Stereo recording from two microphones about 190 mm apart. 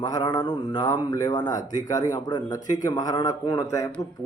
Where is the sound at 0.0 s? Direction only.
20° left (ahead or behind).